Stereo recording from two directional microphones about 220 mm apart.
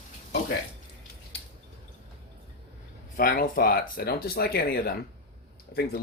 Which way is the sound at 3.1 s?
40° left (ahead or behind).